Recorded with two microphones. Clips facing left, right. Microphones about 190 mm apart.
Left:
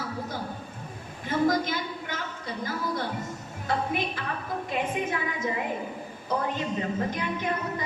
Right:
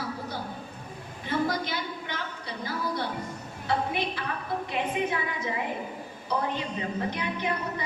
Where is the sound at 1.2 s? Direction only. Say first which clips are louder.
Left 4 dB; 45° left (ahead or behind).